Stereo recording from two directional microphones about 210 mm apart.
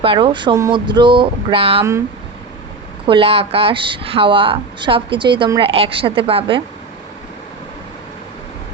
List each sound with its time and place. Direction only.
0.0 s a woman's voice: 25° right (ahead or behind)
3.1 s a woman's voice: 25° right (ahead or behind)